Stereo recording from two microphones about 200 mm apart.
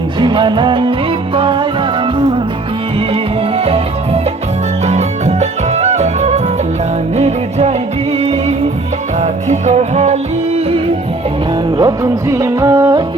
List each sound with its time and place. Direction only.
0.2 s music: 25° right (ahead or behind)
4.9 s music: 35° right (ahead or behind)
11.8 s music: 15° right (ahead or behind)